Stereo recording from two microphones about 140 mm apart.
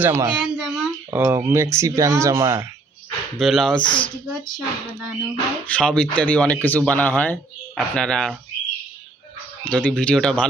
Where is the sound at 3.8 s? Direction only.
35° left (ahead or behind).